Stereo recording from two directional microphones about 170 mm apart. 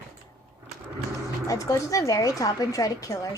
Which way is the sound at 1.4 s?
20° left (ahead or behind).